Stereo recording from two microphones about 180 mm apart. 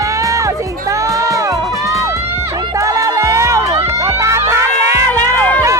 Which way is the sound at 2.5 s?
15° right (ahead or behind).